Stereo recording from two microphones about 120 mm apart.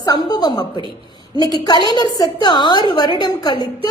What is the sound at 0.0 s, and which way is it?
Speech, 35° left (ahead or behind).